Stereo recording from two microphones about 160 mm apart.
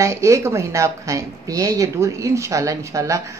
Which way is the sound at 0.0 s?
20° right (ahead or behind).